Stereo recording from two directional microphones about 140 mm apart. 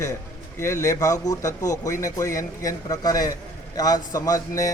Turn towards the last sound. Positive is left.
turn(degrees=25)  # may be behind; listen again after turning